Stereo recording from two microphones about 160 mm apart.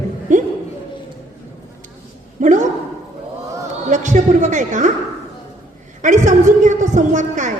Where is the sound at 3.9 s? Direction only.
50° right (ahead or behind).